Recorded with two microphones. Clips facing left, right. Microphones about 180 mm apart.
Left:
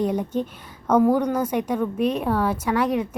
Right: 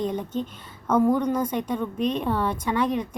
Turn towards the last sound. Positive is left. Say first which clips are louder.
# left 2 dB
turn(degrees=10)  # may be behind; listen again after turning